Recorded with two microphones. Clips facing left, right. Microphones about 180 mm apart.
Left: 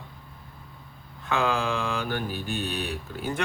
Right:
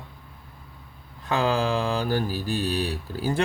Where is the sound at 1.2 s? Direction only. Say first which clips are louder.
Right 2 dB; 35° right (ahead or behind).